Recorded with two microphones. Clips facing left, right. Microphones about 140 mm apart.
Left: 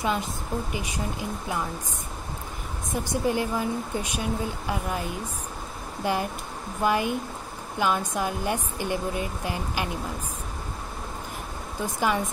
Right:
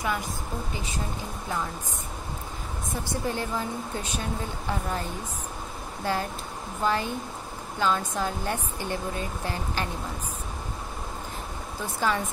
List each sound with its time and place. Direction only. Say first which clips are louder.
0.0 s a woman's voice: left 2 dB; 20° left (ahead or behind)
2.9 s speech: left 5 dB; 15° left (ahead or behind)
6.0 s speech: left 2 dB; 15° left (ahead or behind)
11.8 s speech: left 2 dB; 15° left (ahead or behind)